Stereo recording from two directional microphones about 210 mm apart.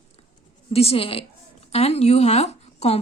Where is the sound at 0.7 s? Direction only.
30° left (ahead or behind).